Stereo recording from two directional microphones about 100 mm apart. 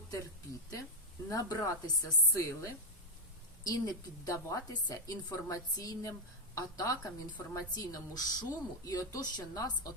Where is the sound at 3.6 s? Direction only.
35° left (ahead or behind).